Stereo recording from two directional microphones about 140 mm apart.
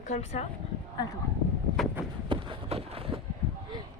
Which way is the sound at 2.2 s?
35° right (ahead or behind).